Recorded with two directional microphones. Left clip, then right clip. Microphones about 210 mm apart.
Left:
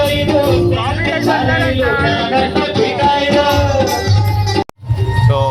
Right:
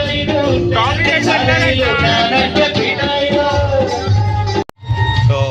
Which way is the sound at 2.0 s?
45° right (ahead or behind).